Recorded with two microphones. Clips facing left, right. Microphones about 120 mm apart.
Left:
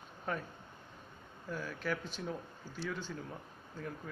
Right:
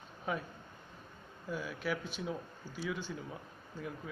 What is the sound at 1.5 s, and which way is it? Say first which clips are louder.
Speech: right 1 dB; 10° right (ahead or behind).